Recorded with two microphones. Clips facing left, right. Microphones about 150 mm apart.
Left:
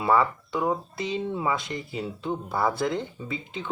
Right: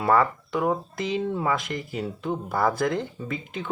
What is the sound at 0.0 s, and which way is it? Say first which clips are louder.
Speech: right 1 dB; 55° right (ahead or behind).